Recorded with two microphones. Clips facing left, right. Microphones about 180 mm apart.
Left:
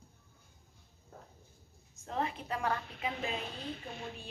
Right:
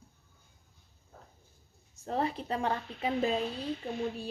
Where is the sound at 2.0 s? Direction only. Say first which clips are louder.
Right 4 dB; 35° right (ahead or behind).